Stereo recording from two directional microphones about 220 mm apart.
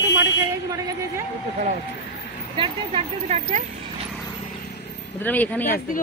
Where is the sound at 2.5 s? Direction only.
25° right (ahead or behind).